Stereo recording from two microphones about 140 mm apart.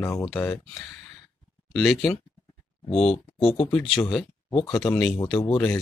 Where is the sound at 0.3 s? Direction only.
10° left (ahead or behind).